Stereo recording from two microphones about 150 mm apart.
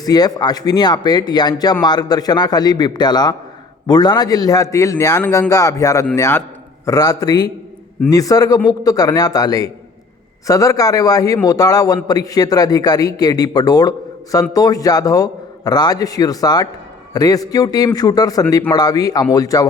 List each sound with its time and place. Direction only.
0.0 s a man's voice: 25° left (ahead or behind)